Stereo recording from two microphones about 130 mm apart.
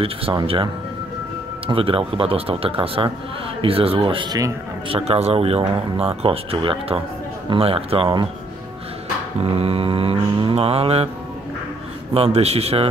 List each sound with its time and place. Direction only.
0.0 s speech: 45° right (ahead or behind)
1.7 s speech: 45° right (ahead or behind)
9.4 s speech: 50° right (ahead or behind)
12.1 s speech: 50° right (ahead or behind)